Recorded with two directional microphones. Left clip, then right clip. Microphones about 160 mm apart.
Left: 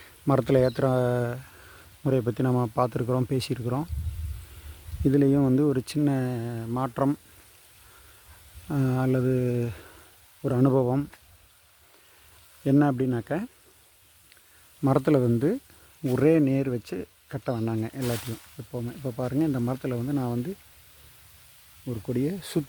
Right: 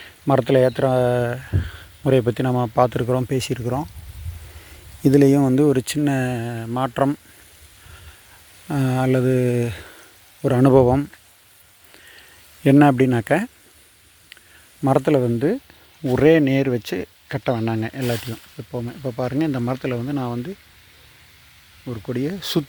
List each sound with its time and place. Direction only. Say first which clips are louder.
0.0 s speech: right 6 dB; 5° left (ahead or behind)
5.0 s speech: right 7 dB; 15° right (ahead or behind)
8.6 s speech: right 6 dB; 5° right (ahead or behind)
10.4 s speech: right 9 dB; 15° right (ahead or behind)
12.8 s speech: right 10 dB; 20° right (ahead or behind)
14.8 s speech: right 5 dB; 5° left (ahead or behind)
18.1 s speech: right 7 dB; 20° right (ahead or behind)
20.1 s speech: right 4 dB; 10° left (ahead or behind)
21.8 s speech: right 4 dB; 5° right (ahead or behind)
22.1 s speech: right 5 dB; 10° left (ahead or behind)